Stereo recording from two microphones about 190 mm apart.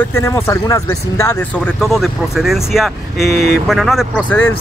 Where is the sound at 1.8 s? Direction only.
Centre (ahead or behind).